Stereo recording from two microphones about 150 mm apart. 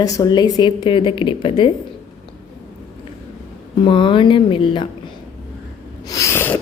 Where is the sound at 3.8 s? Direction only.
35° left (ahead or behind).